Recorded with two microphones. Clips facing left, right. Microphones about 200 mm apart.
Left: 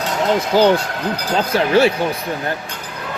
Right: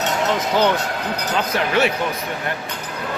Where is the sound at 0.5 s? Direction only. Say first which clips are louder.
Left 6 dB; 30° left (ahead or behind).